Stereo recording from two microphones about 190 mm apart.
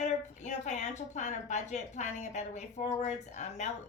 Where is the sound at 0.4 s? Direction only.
40° left (ahead or behind).